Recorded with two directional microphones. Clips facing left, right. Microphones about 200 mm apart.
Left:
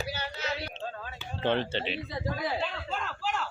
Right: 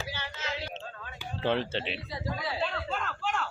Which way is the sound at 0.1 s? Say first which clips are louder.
Left 3 dB; 40° left (ahead or behind).